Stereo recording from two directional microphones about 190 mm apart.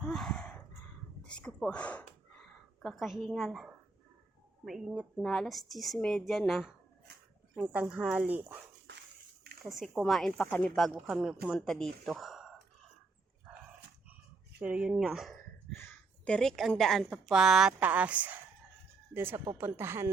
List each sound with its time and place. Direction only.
0.0 s a sound: centre (ahead or behind)
4.6 s speech: centre (ahead or behind)
8.9 s a sound: 65° right (ahead or behind)
9.6 s speech: centre (ahead or behind)
13.5 s dog: 5° right (ahead or behind)
14.6 s speech: 5° right (ahead or behind)